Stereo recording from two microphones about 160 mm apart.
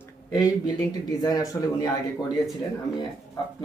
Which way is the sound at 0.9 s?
25° left (ahead or behind).